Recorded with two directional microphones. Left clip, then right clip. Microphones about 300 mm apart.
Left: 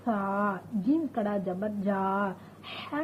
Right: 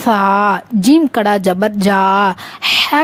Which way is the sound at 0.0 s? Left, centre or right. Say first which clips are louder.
Right 18 dB; right.